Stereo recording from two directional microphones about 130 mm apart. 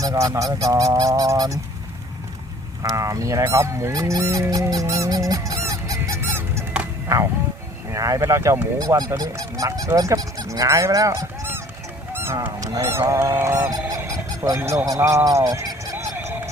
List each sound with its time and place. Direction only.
0.0 s speech: 25° right (ahead or behind)
2.8 s goose: 25° right (ahead or behind)
7.9 s speech: 25° right (ahead or behind)
12.1 s goose: 20° right (ahead or behind)
14.8 s speech: 25° right (ahead or behind)
16.1 s a sound: 15° right (ahead or behind)